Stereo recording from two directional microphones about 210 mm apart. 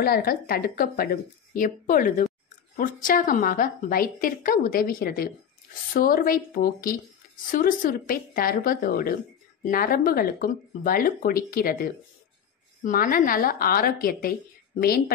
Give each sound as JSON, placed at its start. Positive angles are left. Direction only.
{"t": 0.0, "sound": "speech", "side_deg": 45}